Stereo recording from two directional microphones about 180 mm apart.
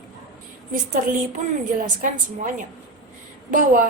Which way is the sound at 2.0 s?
45° right (ahead or behind).